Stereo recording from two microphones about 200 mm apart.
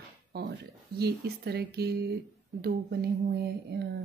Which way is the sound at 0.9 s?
55° right (ahead or behind).